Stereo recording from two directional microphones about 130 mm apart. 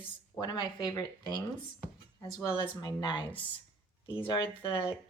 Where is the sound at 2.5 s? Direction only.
35° left (ahead or behind).